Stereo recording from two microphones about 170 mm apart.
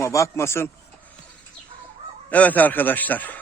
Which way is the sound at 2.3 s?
10° left (ahead or behind).